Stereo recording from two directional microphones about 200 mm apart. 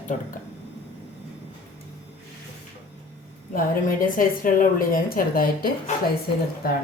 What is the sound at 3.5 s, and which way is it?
A woman's voice, 45° left (ahead or behind).